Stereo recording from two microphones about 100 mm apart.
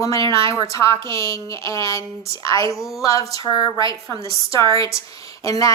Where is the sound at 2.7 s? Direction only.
Centre (ahead or behind).